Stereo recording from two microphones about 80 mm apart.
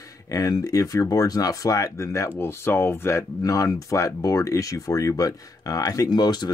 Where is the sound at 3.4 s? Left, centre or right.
Left.